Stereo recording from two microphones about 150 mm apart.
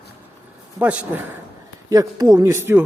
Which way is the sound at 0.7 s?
10° right (ahead or behind).